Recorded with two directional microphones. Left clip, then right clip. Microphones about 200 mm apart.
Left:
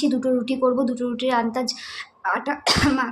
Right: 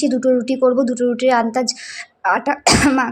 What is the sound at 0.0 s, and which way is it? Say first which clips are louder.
A woman's voice: right 6 dB; 15° right (ahead or behind).